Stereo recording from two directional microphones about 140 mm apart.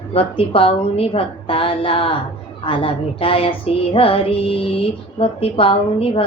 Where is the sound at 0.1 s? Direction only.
40° left (ahead or behind).